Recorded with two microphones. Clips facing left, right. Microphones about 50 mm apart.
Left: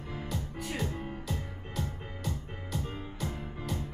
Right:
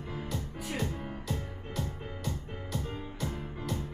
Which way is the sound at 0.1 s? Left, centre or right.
Centre.